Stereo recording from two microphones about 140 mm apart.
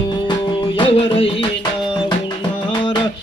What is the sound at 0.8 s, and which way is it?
Music, 40° left (ahead or behind).